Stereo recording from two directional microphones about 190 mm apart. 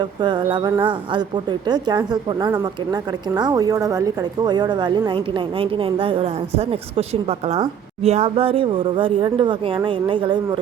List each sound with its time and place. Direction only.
0.0 s a woman's voice: 25° right (ahead or behind)